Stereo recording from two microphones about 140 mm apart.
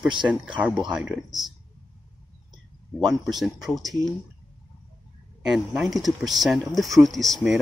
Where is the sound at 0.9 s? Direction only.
5° right (ahead or behind).